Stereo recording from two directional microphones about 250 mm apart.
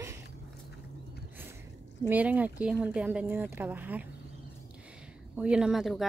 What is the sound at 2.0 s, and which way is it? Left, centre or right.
Speech, centre.